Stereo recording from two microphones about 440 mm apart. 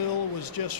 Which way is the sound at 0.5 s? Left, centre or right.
Left.